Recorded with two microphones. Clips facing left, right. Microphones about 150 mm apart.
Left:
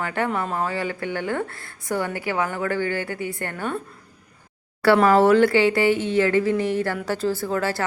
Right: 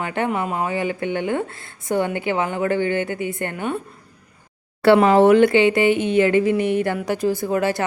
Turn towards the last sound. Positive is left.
turn(degrees=-20)  # may be behind; listen again after turning